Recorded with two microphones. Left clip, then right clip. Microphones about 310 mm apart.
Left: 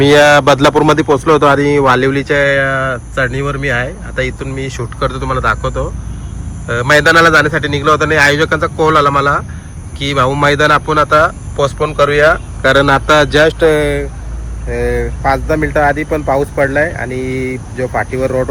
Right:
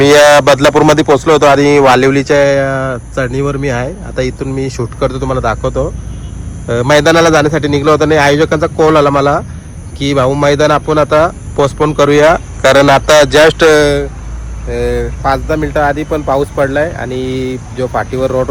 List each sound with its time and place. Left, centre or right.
0.0 s speech: centre
13.4 s speech: right
13.8 s speech: centre
14.7 s speech: centre
17.1 s speech: centre
17.7 s speech: centre